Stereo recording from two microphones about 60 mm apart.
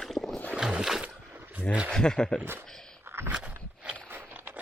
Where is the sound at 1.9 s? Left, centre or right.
Centre.